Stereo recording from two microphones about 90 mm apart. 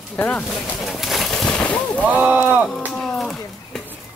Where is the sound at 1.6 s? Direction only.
15° left (ahead or behind).